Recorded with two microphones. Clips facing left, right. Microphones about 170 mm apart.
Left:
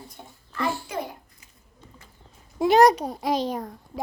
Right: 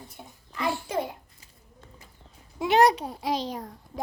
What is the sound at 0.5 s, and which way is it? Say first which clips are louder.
Speech: left 2 dB; 15° right (ahead or behind).